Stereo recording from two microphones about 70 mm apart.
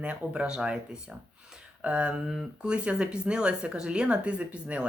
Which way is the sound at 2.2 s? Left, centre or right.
Centre.